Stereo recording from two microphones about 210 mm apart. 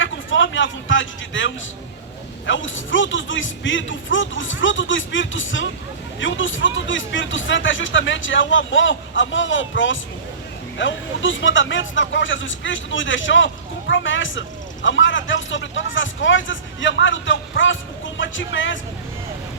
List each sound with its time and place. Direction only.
0.0 s speech: 65° left (ahead or behind)